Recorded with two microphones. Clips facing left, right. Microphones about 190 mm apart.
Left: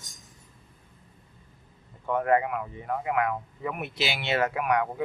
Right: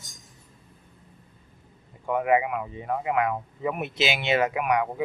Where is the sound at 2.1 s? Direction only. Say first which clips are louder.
Right 1 dB; 10° right (ahead or behind).